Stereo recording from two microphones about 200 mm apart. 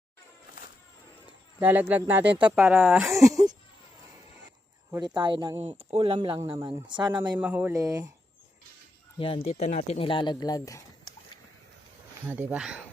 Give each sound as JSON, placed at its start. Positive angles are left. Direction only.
{"t": 1.5, "sound": "speech", "side_deg": -10}
{"t": 3.2, "sound": "speech", "side_deg": -15}
{"t": 4.9, "sound": "speech", "side_deg": -20}
{"t": 7.3, "sound": "speech", "side_deg": -10}
{"t": 9.1, "sound": "speech", "side_deg": 25}
{"t": 12.3, "sound": "speech", "side_deg": -10}